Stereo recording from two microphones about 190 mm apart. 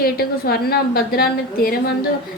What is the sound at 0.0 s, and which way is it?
A woman's voice, 55° left (ahead or behind).